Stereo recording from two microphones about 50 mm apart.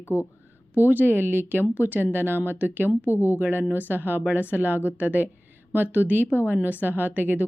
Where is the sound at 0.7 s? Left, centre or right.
Right.